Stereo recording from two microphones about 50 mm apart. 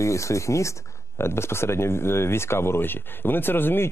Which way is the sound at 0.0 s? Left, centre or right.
Left.